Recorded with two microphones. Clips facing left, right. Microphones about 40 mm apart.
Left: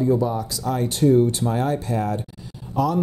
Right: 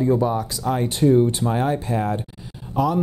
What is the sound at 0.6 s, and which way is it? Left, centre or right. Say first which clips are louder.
Speech: even; right.